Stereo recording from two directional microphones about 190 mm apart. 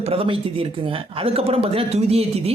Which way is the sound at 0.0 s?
30° right (ahead or behind).